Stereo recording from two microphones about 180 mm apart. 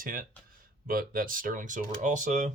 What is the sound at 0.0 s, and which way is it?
Speech, 50° right (ahead or behind).